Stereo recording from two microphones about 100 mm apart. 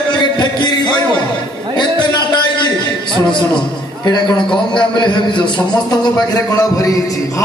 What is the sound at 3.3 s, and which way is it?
A man's voice, 50° left (ahead or behind).